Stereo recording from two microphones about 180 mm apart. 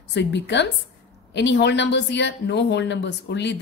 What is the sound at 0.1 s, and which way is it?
Speech, 70° left (ahead or behind).